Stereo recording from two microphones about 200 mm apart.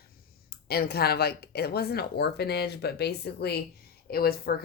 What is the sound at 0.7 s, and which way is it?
Speech, 50° left (ahead or behind).